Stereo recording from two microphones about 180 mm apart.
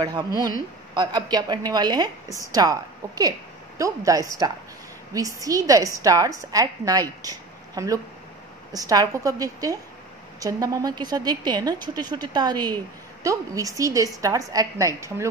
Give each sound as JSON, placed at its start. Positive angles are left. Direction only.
{"t": 0.0, "sound": "a woman's voice", "side_deg": -20}